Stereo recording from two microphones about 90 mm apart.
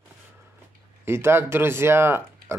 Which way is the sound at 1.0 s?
25° right (ahead or behind).